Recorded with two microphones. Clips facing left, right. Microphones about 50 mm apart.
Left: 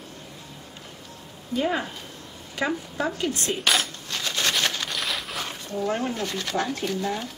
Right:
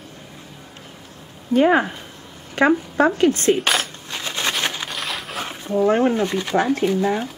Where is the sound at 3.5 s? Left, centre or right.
Centre.